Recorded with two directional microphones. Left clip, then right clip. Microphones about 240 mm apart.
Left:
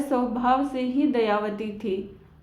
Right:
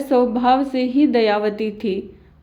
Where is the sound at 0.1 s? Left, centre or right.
Right.